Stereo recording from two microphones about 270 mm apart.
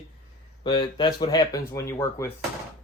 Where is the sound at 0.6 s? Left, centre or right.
Centre.